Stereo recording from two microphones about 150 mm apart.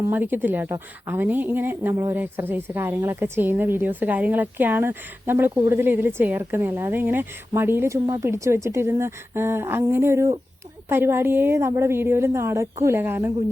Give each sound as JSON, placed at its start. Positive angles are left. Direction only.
{"t": 0.1, "sound": "a woman's voice", "side_deg": -15}